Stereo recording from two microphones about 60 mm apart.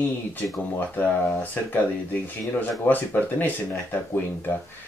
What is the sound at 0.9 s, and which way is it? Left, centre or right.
Speech, left.